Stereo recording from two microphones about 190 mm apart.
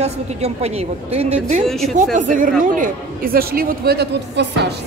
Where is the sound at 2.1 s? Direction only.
45° right (ahead or behind); by 4.7 s 60° right (ahead or behind).